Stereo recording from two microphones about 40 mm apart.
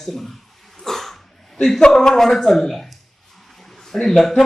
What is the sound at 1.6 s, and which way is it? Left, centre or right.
A man's voice, centre.